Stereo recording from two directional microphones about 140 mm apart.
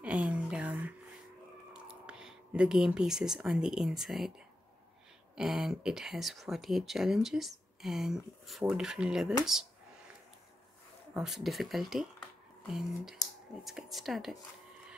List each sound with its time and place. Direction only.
0.3 s a sound: 10° right (ahead or behind)
4.0 s speech: centre (ahead or behind)
5.3 s speech: 5° right (ahead or behind)
11.1 s speech: 5° right (ahead or behind)